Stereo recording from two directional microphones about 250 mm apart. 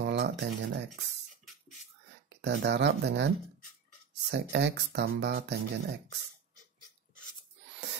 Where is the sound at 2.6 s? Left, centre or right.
Right.